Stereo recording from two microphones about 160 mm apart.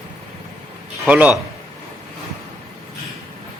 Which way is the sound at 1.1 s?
10° right (ahead or behind).